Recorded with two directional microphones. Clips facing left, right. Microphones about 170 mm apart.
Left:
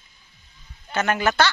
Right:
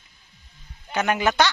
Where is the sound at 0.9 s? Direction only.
15° right (ahead or behind).